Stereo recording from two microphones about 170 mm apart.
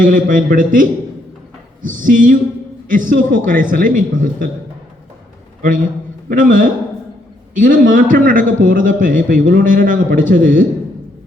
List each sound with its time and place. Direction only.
0.0 s a man's voice: 50° right (ahead or behind)
5.6 s a man's voice: 55° right (ahead or behind)